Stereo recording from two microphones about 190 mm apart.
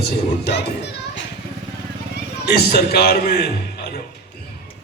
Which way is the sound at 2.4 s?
55° left (ahead or behind).